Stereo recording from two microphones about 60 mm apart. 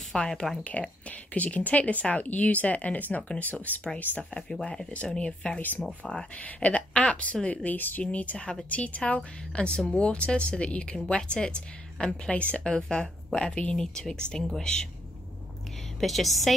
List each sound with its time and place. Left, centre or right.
0.1 s speech: centre
1.3 s speech: left
4.2 s speech: centre
5.6 s speech: left
6.0 s speech: centre
8.6 s speech: left
16.0 s a woman's voice: centre